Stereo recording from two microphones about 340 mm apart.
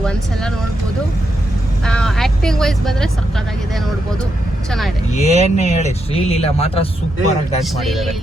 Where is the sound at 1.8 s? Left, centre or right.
Centre.